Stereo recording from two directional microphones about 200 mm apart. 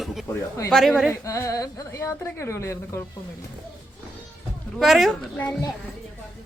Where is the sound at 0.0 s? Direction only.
Centre (ahead or behind).